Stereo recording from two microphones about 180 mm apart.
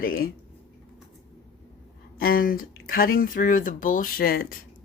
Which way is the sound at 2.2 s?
55° left (ahead or behind).